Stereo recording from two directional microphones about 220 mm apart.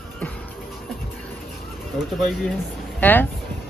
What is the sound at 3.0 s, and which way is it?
Speech, 10° left (ahead or behind).